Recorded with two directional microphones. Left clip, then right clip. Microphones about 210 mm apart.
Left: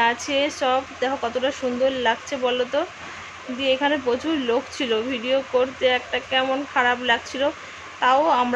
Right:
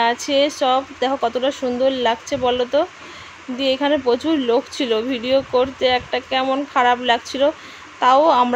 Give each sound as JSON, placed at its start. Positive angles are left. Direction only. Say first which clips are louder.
{"t": 0.0, "sound": "speech", "louder": "right 4 dB", "side_deg": -20}